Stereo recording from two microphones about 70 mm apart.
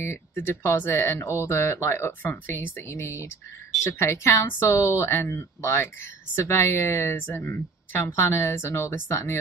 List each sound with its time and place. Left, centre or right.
0.0 s speech: left